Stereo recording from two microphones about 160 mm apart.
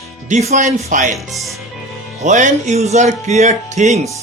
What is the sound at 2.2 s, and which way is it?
Speech, 50° right (ahead or behind).